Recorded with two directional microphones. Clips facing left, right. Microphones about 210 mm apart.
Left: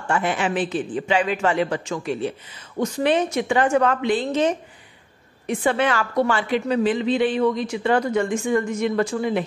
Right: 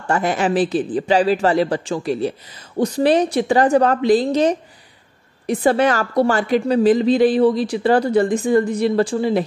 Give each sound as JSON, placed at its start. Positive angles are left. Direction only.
{"t": 0.1, "sound": "speech", "side_deg": -40}